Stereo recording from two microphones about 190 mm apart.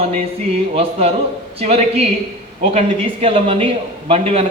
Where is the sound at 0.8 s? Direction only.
30° right (ahead or behind).